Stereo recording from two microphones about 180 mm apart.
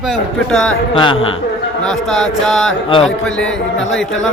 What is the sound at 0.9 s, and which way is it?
Speech, 30° left (ahead or behind).